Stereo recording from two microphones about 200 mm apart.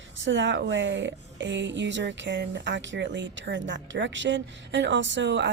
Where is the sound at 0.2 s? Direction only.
65° right (ahead or behind).